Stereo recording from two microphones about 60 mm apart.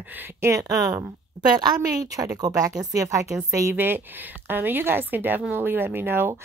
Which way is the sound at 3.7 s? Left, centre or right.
Right.